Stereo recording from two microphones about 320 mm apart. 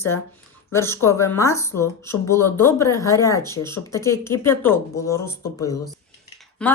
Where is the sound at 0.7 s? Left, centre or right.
Centre.